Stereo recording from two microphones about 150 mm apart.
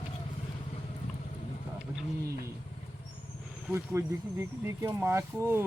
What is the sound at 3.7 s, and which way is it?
Speech, 15° right (ahead or behind).